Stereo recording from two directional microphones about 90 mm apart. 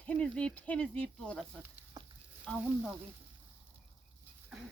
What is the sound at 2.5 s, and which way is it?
Speech, 10° left (ahead or behind).